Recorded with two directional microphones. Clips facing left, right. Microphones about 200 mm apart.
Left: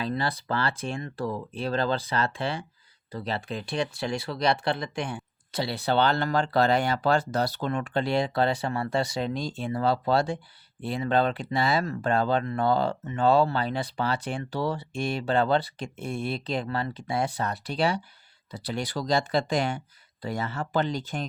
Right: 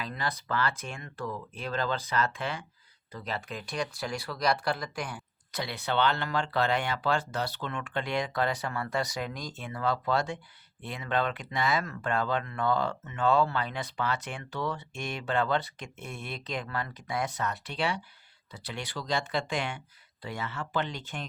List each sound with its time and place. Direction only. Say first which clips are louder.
0.0 s speech: left 6 dB; 30° left (ahead or behind)